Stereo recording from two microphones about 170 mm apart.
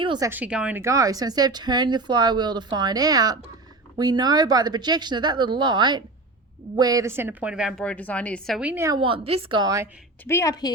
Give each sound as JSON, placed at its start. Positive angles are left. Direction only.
{"t": 0.0, "sound": "speech", "side_deg": -30}
{"t": 0.3, "sound": "a woman's voice", "side_deg": -10}
{"t": 8.7, "sound": "a woman's voice", "side_deg": -15}
{"t": 9.0, "sound": "speech", "side_deg": -30}
{"t": 10.2, "sound": "a woman's voice", "side_deg": 15}